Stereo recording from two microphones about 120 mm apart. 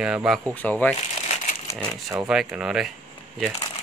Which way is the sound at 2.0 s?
5° right (ahead or behind).